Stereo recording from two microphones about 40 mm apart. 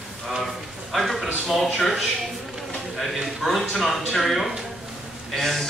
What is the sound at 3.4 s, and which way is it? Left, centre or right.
A man's voice, centre.